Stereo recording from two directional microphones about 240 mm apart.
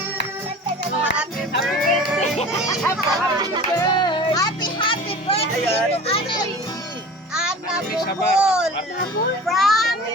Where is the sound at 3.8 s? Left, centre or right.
Centre.